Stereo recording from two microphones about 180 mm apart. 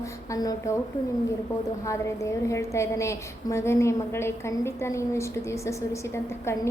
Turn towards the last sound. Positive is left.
turn(degrees=15)  # may be behind; listen again after turning